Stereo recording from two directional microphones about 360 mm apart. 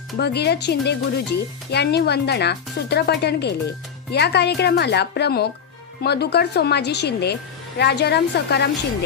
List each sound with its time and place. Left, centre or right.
0.2 s speech: left